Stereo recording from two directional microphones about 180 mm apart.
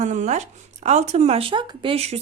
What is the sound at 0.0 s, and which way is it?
A woman's voice, 40° right (ahead or behind).